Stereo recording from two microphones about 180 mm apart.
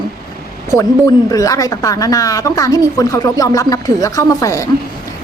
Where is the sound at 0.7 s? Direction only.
15° left (ahead or behind).